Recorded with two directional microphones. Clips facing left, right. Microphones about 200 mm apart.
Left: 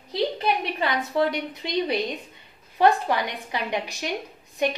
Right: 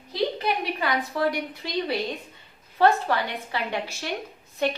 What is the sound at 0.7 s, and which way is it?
A woman's voice, 25° left (ahead or behind).